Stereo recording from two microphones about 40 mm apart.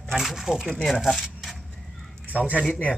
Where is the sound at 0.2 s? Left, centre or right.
Centre.